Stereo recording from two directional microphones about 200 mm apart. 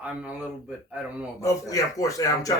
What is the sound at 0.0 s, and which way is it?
Speech, 5° right (ahead or behind).